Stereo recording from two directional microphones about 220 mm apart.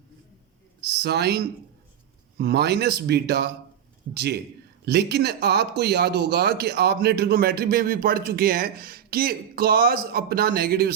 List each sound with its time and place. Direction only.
0.8 s speech: 50° right (ahead or behind)